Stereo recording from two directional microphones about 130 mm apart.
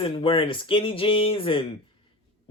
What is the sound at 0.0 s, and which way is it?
Speech, 45° left (ahead or behind).